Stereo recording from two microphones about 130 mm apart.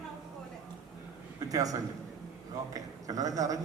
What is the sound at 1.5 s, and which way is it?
A man's voice, 30° right (ahead or behind).